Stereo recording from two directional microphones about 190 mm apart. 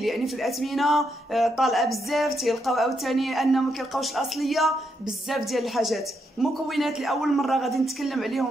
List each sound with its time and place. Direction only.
0.0 s speech: centre (ahead or behind)